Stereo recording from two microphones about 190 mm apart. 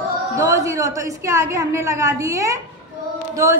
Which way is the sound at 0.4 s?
15° right (ahead or behind).